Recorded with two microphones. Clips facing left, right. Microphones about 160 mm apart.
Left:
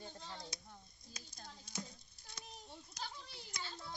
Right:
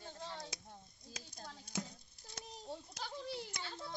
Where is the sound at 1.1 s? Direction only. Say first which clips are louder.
Right 4 dB; 70° right (ahead or behind).